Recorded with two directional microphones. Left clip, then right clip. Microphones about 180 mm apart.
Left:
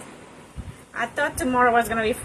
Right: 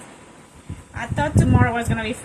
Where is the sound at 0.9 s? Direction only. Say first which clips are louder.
Right 1 dB; 25° left (ahead or behind).